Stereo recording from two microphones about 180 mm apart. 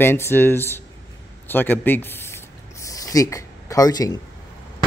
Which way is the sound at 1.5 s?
10° left (ahead or behind).